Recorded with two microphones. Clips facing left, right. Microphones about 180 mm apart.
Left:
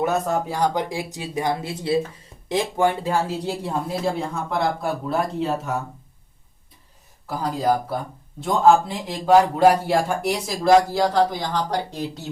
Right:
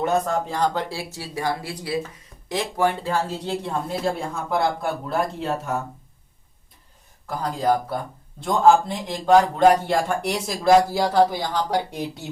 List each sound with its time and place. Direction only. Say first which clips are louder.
0.0 s speech: even; 5° left (ahead or behind)
3.1 s a man's voice: left 1 dB; 10° left (ahead or behind)
7.3 s a man's voice: even; 5° left (ahead or behind)